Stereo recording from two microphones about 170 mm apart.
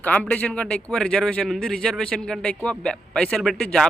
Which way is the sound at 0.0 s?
10° left (ahead or behind).